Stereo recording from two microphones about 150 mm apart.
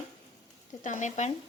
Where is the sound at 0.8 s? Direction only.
55° left (ahead or behind).